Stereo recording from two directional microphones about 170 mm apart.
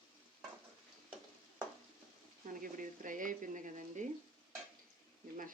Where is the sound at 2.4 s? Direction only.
50° right (ahead or behind).